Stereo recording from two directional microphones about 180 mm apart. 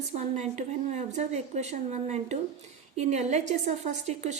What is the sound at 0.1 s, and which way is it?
A woman's voice, 40° right (ahead or behind).